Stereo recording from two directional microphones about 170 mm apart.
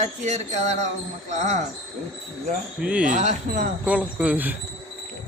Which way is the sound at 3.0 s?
45° right (ahead or behind).